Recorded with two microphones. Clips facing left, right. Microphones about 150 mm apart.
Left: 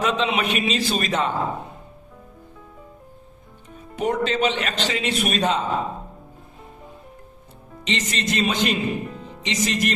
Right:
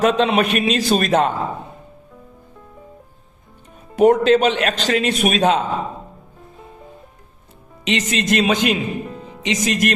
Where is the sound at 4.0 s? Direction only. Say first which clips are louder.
Right 9 dB; 65° right (ahead or behind).